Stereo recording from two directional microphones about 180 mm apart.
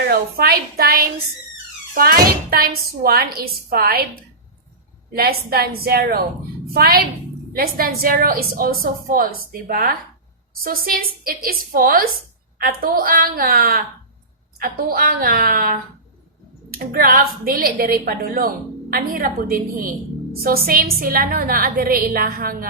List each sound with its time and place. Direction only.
0.1 s a woman's voice: 55° right (ahead or behind)
5.1 s a woman's voice: 55° right (ahead or behind)